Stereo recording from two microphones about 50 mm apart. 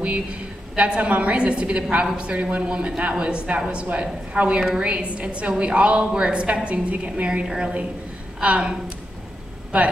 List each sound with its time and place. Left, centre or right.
0.0 s speech: right
7.4 s a woman's voice: centre